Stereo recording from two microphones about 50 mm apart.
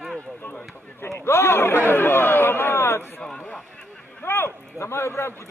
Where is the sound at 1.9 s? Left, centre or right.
Left.